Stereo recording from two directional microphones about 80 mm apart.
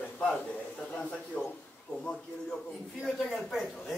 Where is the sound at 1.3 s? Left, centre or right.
Centre.